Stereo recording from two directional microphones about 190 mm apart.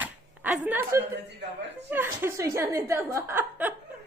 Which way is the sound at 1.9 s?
10° right (ahead or behind).